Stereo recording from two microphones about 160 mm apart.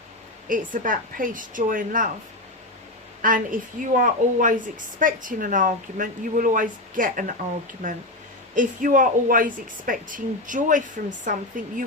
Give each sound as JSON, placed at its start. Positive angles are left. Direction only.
{"t": 0.4, "sound": "speech", "side_deg": -55}
{"t": 3.2, "sound": "speech", "side_deg": -55}
{"t": 8.5, "sound": "speech", "side_deg": -55}